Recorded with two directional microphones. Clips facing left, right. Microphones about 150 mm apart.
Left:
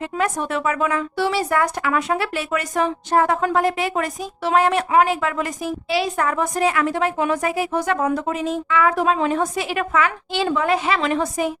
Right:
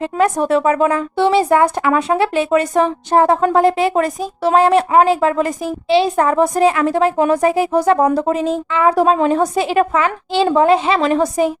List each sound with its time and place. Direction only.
0.0 s speech: 35° right (ahead or behind)